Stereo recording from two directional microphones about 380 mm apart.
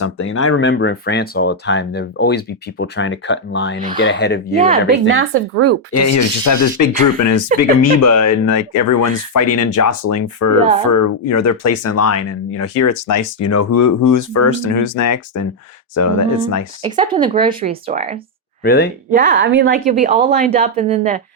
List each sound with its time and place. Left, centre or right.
0.0 s speech: left
4.9 s speech: right
5.9 s speech: left
16.8 s speech: centre
18.6 s speech: left
19.1 s speech: right
19.9 s speech: centre